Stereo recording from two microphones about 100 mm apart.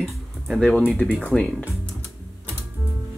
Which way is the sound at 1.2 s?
5° left (ahead or behind).